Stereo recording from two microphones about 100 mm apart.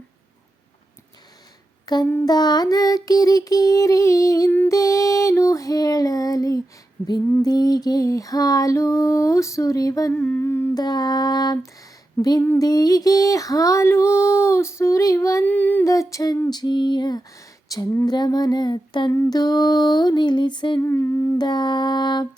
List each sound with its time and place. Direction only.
1.9 s female singing: 40° left (ahead or behind)
4.4 s humming: 15° left (ahead or behind)
4.7 s female singing: 35° left (ahead or behind)
10.1 s humming: 15° left (ahead or behind)
10.8 s music: 45° left (ahead or behind)
12.2 s speech: 25° left (ahead or behind)
12.5 s female singing: 40° left (ahead or behind)
15.4 s humming: 15° left (ahead or behind)
15.9 s female singing: 35° left (ahead or behind)
16.5 s music: 45° left (ahead or behind)
17.7 s female singing: 35° left (ahead or behind)
18.0 s music: 40° left (ahead or behind)
20.8 s humming: 25° left (ahead or behind)
21.3 s music: 45° left (ahead or behind)